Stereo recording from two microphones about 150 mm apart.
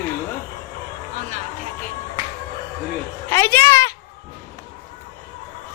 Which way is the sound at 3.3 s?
15° left (ahead or behind).